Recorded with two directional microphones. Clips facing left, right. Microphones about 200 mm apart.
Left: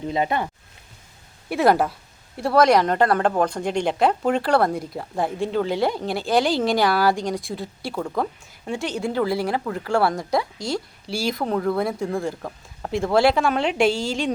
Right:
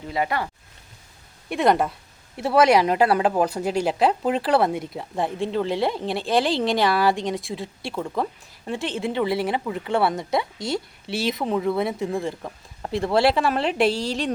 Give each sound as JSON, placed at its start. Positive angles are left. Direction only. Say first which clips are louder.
{"t": 0.1, "sound": "speech", "louder": "left 1 dB", "side_deg": 20}
{"t": 1.5, "sound": "speech", "louder": "left 1 dB", "side_deg": 5}